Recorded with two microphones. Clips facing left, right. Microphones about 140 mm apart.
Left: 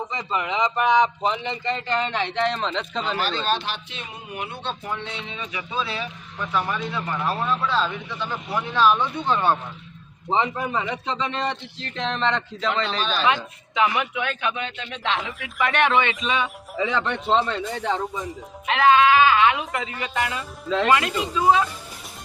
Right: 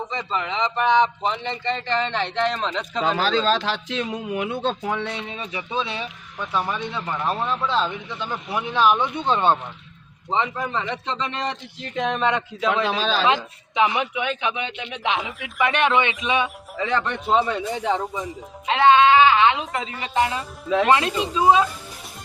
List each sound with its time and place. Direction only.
0.3 s speech: 10° left (ahead or behind); by 3.2 s 5° right (ahead or behind)
3.5 s speech: 90° right
5.4 s speech: 30° right (ahead or behind)
5.7 s speech: 20° right (ahead or behind)
10.2 s a man's voice: 15° left (ahead or behind)
11.8 s speech: 10° right (ahead or behind)
13.0 s speech: 90° right
13.2 s speech: 20° right (ahead or behind)
16.8 s speech: centre (ahead or behind)
17.7 s speech: 20° right (ahead or behind)
18.0 s speech: centre (ahead or behind)
18.6 s speech: 25° right (ahead or behind)